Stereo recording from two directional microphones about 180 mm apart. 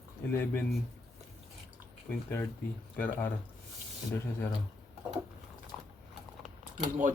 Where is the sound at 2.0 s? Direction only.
10° left (ahead or behind).